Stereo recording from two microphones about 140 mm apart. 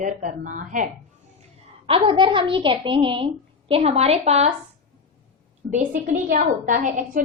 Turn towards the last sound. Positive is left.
turn(degrees=-65)  # may be behind; listen again after turning